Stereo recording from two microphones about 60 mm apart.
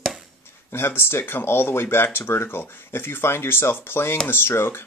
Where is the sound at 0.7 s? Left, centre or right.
Left.